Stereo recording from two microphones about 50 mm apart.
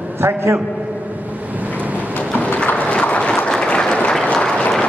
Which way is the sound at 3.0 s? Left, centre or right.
Left.